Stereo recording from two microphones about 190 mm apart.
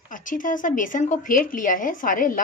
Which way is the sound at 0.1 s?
45° left (ahead or behind).